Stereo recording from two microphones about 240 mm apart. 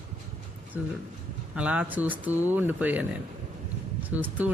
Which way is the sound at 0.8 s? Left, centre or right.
Centre.